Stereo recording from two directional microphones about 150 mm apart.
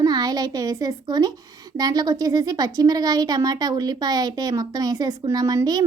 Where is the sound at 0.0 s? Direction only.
25° right (ahead or behind).